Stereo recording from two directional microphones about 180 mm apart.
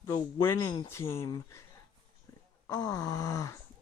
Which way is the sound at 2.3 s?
15° left (ahead or behind).